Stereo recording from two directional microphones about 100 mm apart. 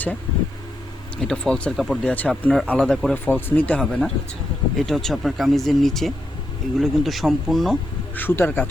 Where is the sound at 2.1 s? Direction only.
15° left (ahead or behind).